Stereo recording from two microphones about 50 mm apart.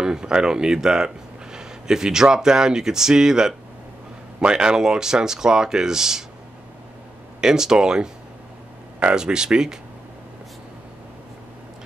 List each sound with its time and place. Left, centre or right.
0.0 s speech: centre
7.3 s speech: centre
9.1 s speech: centre